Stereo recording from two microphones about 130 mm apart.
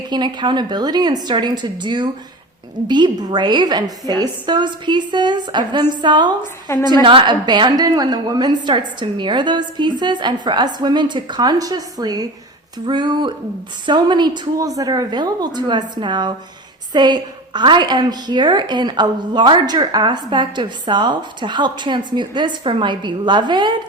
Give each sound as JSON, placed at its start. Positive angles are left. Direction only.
{"t": 0.1, "sound": "a woman's voice", "side_deg": -35}